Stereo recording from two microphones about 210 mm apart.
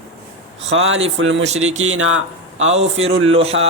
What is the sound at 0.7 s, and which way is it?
Speech, 65° right (ahead or behind).